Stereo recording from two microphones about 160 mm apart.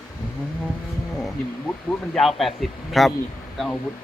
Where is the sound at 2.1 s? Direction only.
Centre (ahead or behind).